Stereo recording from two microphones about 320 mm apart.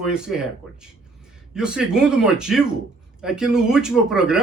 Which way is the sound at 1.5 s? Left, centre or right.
Centre.